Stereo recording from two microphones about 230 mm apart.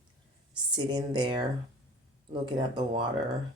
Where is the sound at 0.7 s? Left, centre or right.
Centre.